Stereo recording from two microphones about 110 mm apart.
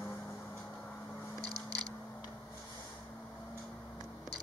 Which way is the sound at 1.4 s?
35° right (ahead or behind).